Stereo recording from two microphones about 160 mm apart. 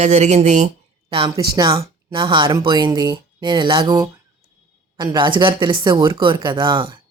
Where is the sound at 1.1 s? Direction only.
30° right (ahead or behind).